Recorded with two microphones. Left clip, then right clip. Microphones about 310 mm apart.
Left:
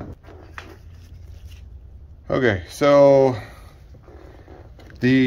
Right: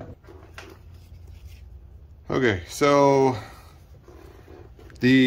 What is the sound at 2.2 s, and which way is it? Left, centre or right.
Speech, centre.